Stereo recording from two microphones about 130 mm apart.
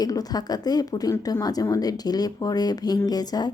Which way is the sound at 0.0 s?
30° left (ahead or behind).